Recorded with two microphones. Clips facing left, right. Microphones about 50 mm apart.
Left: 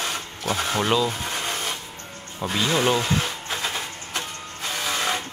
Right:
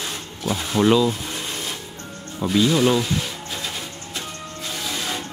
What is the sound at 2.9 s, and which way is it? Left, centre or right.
Music, left.